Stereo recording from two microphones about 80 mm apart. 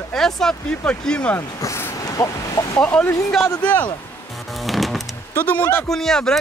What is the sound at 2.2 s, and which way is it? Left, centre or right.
Speech, left.